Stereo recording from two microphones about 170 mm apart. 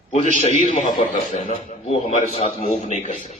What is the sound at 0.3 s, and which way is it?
A man's voice, 45° left (ahead or behind).